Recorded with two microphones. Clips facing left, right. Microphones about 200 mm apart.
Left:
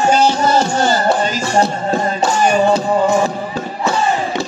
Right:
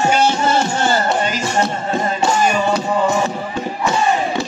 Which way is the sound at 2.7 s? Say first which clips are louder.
Left 3 dB; 35° left (ahead or behind).